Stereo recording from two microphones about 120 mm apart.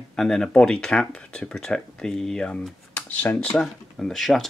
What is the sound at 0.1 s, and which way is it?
Speech, 5° left (ahead or behind).